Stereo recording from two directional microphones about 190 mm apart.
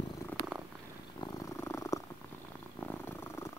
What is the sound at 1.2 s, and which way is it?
Purr, 15° left (ahead or behind).